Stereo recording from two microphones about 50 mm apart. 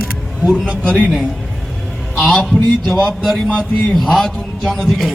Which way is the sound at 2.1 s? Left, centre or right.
Centre.